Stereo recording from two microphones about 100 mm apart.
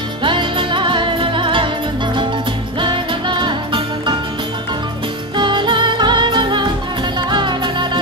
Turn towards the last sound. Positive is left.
turn(degrees=-55)  # may be behind; listen again after turning